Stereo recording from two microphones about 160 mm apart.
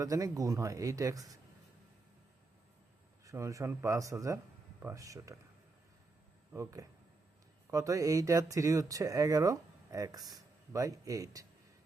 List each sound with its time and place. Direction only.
0.0 s speech: 20° right (ahead or behind)
3.2 s speech: 20° right (ahead or behind)
6.5 s speech: 20° right (ahead or behind)